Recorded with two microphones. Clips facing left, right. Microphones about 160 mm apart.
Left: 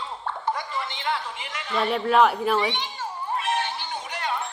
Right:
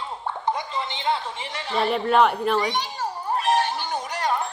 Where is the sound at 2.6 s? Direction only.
40° right (ahead or behind).